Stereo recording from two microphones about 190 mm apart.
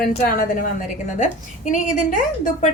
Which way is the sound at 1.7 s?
40° left (ahead or behind).